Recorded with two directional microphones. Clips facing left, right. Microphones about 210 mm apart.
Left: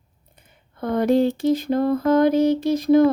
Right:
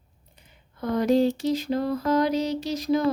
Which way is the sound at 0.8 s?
55° left (ahead or behind).